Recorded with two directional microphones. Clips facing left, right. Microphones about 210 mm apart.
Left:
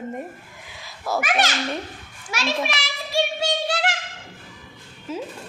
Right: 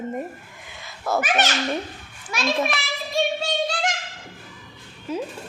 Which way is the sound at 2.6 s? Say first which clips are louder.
Right 2 dB; 80° left.